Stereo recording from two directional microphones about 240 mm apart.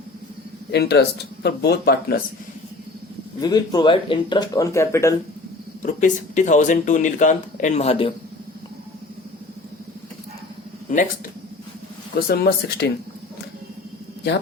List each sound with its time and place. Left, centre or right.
0.7 s speech: left
3.4 s speech: centre
5.8 s speech: left
10.9 s speech: left
12.3 s speech: left